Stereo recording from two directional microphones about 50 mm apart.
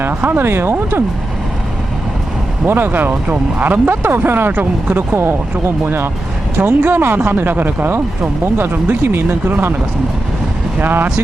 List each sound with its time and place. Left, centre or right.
0.2 s speech: right
2.6 s speech: right
4.5 s speech: right
5.1 s speech: right
6.6 s speech: right
6.9 s speech: right
10.8 s speech: right